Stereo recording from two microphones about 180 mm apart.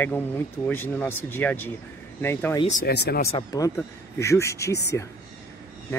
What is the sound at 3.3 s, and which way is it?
Speech, 20° left (ahead or behind).